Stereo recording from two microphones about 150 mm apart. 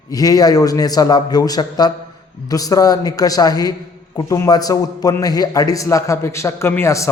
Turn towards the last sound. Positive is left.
turn(degrees=20)  # may be behind; listen again after turning